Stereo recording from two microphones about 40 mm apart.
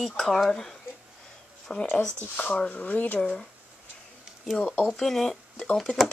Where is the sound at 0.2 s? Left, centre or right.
Centre.